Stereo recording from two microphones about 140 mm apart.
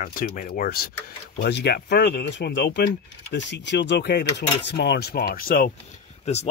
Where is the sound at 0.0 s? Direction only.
85° left.